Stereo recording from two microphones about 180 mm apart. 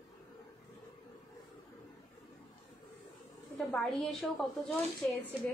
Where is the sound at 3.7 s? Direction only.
Centre (ahead or behind).